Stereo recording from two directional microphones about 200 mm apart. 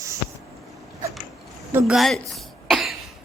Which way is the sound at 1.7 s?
5° right (ahead or behind).